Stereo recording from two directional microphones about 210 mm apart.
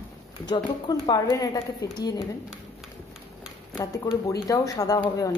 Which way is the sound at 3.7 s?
15° left (ahead or behind).